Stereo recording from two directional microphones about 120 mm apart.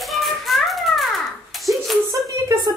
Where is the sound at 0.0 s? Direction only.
Centre (ahead or behind).